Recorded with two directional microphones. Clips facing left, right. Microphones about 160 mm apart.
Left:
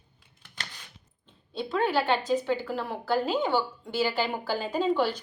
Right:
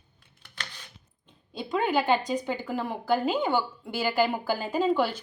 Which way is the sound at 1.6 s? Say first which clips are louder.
Even; 10° right (ahead or behind).